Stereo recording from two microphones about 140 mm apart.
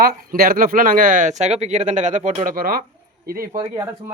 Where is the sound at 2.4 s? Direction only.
90° right.